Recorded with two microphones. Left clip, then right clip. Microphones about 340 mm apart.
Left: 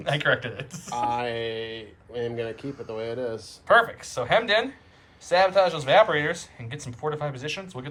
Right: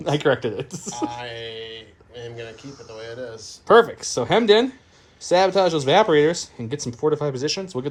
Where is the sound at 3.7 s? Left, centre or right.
Centre.